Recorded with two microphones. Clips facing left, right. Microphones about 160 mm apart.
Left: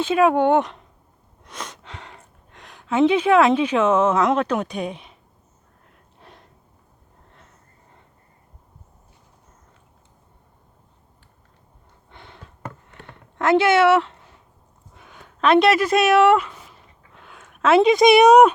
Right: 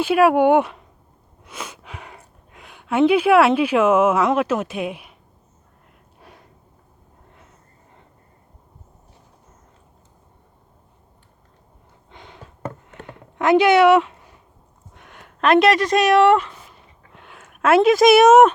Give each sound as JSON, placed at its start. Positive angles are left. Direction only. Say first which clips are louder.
{"t": 0.0, "sound": "speech", "louder": "right 2 dB", "side_deg": -10}
{"t": 1.5, "sound": "a sound", "louder": "right 1 dB", "side_deg": -5}
{"t": 6.1, "sound": "gasp", "louder": "right 1 dB", "side_deg": -5}
{"t": 12.1, "sound": "a sound", "louder": "right 2 dB", "side_deg": -15}
{"t": 13.1, "sound": "speech", "louder": "right 2 dB", "side_deg": -15}
{"t": 14.9, "sound": "speech", "louder": "right 1 dB", "side_deg": 0}